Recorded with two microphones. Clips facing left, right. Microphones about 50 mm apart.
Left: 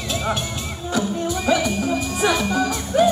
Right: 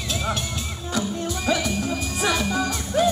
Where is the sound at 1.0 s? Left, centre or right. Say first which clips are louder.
Left 4 dB; centre.